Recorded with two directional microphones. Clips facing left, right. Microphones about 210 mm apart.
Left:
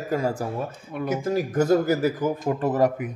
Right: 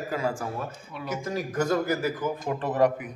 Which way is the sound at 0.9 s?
50° left (ahead or behind).